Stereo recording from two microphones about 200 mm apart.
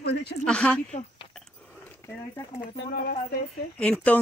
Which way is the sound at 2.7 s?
50° left (ahead or behind).